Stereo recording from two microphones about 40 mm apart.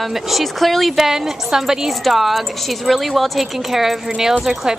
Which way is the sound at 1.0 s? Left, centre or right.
Centre.